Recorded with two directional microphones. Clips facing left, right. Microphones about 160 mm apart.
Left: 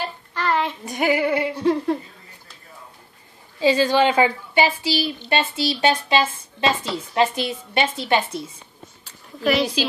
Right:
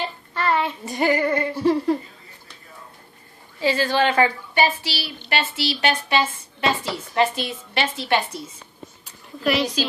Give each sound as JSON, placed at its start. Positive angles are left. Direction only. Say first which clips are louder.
{"t": 0.0, "sound": "child singing", "louder": "right 1 dB", "side_deg": 0}
{"t": 1.6, "sound": "a woman's voice", "louder": "right 2 dB", "side_deg": -5}
{"t": 3.6, "sound": "a woman's voice", "louder": "left 3 dB", "side_deg": 15}
{"t": 9.4, "sound": "a woman's voice", "louder": "left 2 dB", "side_deg": 0}